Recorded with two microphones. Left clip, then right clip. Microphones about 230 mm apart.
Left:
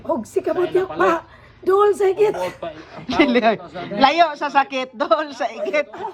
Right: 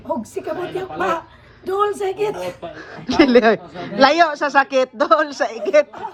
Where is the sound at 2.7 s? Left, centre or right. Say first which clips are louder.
Right 1 dB; centre.